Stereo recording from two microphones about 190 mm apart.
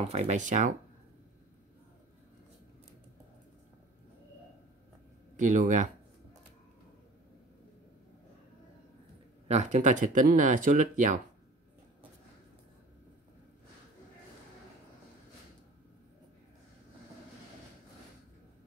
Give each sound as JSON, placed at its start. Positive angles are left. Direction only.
{"t": 0.0, "sound": "speech", "side_deg": -35}
{"t": 5.4, "sound": "speech", "side_deg": -40}
{"t": 9.5, "sound": "speech", "side_deg": -40}